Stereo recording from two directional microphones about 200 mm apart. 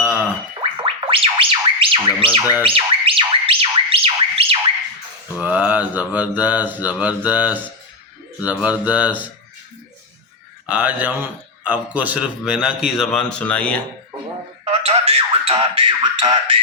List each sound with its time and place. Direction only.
0.0 s a sound: 10° right (ahead or behind)
0.8 s music: 25° right (ahead or behind)
5.4 s mantra: 5° right (ahead or behind)
10.7 s a man's voice: 5° right (ahead or behind)
14.6 s speech: 30° right (ahead or behind)